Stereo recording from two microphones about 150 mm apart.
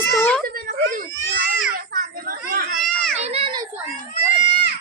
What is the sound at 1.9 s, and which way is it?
Children playing, 75° right (ahead or behind).